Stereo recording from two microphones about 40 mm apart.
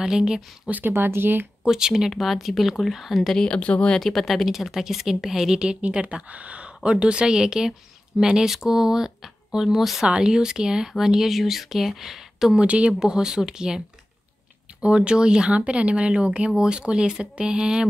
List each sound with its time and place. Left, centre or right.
0.0 s speech: centre
0.7 s speech: right
0.9 s speech: right
1.6 s speech: centre
3.5 s speech: left
4.0 s speech: centre
4.5 s speech: centre
5.6 s speech: right; by 10.0 s centre
10.0 s speech: right
12.5 s speech: right
13.0 s speech: centre
14.8 s speech: right